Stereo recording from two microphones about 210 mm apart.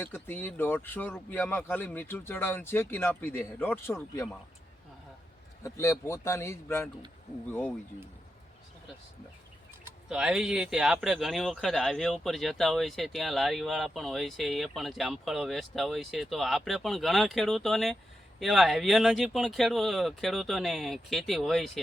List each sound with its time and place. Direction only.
0.0 s speech: 10° left (ahead or behind)
5.6 s speech: 15° left (ahead or behind)
9.8 s speech: 5° right (ahead or behind)